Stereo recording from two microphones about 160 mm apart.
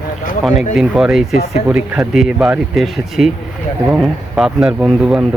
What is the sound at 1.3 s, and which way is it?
Speech, 45° left (ahead or behind).